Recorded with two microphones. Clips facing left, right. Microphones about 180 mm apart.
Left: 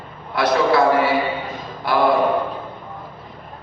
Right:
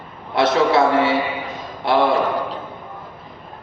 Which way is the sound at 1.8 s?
25° right (ahead or behind).